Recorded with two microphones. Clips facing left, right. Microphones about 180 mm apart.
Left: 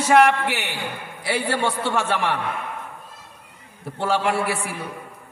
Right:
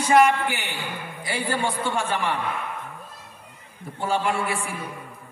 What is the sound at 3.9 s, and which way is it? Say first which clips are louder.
Speech: left 3 dB; 70° left (ahead or behind).